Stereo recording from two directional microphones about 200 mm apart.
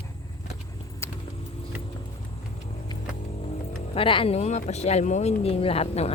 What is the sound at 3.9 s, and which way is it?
Speech, 25° left (ahead or behind).